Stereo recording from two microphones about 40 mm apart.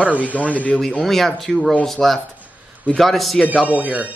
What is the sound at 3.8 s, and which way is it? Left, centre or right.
Speech, right.